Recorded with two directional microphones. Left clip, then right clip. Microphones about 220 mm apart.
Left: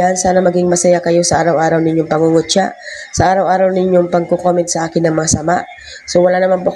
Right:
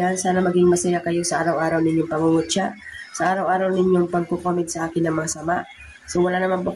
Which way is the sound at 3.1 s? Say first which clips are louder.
Left 9 dB; 25° left (ahead or behind).